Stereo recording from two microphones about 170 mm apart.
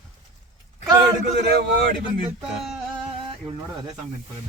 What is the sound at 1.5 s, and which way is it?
Speech, 65° right (ahead or behind).